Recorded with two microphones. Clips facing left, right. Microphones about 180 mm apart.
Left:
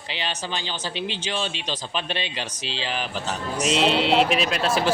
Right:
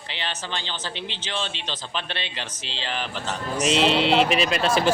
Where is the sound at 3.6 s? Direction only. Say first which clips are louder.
Right 1 dB; centre (ahead or behind).